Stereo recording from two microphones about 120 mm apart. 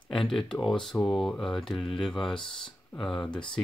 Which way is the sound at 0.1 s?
Centre (ahead or behind).